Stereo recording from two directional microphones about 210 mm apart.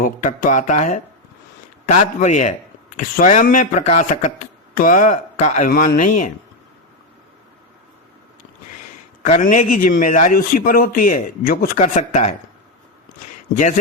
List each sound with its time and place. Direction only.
0.0 s speech: 40° left (ahead or behind)
9.2 s speech: 35° left (ahead or behind)
13.5 s speech: 35° left (ahead or behind)